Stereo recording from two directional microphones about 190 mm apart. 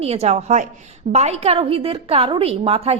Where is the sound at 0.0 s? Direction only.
35° right (ahead or behind).